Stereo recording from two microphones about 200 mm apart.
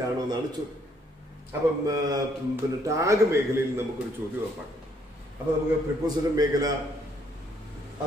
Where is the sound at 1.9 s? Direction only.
20° right (ahead or behind).